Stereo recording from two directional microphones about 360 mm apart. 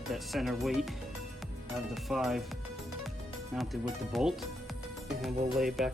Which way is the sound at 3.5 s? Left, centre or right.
Centre.